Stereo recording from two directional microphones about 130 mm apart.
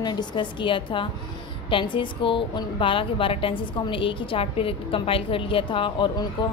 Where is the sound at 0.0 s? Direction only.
35° left (ahead or behind).